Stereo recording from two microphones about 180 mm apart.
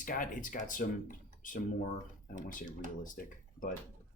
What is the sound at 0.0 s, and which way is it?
Speech, 50° left (ahead or behind).